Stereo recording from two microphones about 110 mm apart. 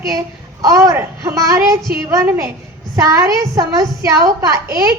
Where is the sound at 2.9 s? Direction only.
30° right (ahead or behind).